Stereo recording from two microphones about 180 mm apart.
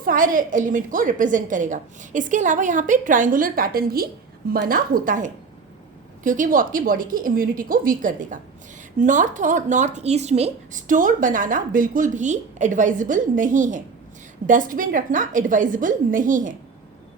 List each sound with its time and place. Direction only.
0.0 s speech: 50° right (ahead or behind)